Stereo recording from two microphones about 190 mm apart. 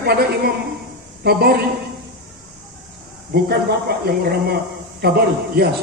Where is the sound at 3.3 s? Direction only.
55° right (ahead or behind).